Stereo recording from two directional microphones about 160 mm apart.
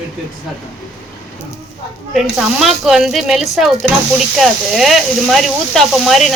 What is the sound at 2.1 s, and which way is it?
Speech, centre (ahead or behind).